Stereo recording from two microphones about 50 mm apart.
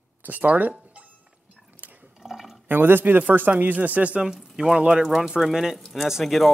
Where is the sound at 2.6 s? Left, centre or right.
Right.